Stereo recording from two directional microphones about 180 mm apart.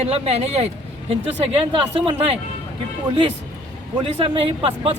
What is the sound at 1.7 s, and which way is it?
Speech, 30° right (ahead or behind).